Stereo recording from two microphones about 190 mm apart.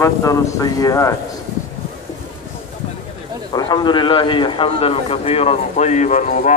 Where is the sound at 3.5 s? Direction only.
20° left (ahead or behind); by 6.5 s 40° left (ahead or behind).